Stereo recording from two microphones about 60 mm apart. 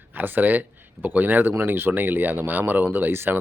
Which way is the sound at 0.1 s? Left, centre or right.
Right.